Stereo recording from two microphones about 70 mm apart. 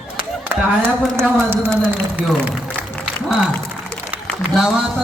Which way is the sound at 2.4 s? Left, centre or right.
Right.